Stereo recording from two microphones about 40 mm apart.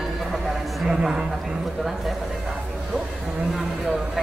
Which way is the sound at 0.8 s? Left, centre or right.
Centre.